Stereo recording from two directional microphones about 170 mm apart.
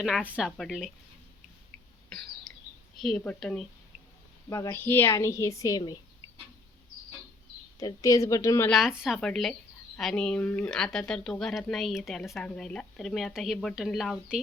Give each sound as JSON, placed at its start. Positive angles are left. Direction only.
{"t": 0.3, "sound": "speech", "side_deg": -5}
{"t": 2.0, "sound": "cough", "side_deg": 5}
{"t": 3.0, "sound": "speech", "side_deg": 5}
{"t": 4.4, "sound": "a woman's voice", "side_deg": 20}
{"t": 7.8, "sound": "a woman's voice", "side_deg": 20}
{"t": 8.7, "sound": "speech", "side_deg": -5}